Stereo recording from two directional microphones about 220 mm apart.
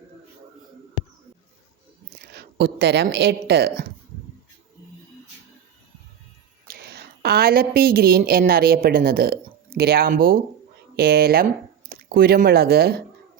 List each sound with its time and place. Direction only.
2.3 s speech: 50° right (ahead or behind)
6.7 s a woman's voice: 45° right (ahead or behind)